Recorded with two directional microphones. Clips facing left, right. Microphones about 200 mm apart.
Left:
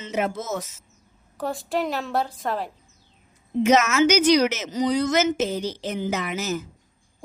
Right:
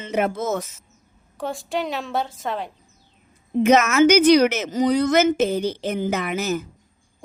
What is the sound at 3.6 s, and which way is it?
A woman's voice, 55° right (ahead or behind).